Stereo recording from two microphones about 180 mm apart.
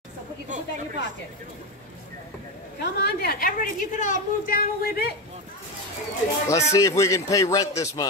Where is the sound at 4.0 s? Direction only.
50° left (ahead or behind).